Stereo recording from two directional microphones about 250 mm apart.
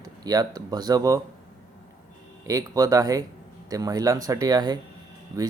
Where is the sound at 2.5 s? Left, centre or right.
Centre.